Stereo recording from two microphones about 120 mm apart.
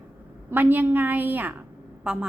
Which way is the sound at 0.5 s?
15° right (ahead or behind).